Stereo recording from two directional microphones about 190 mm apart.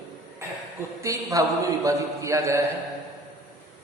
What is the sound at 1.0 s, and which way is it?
A man's voice, 15° right (ahead or behind).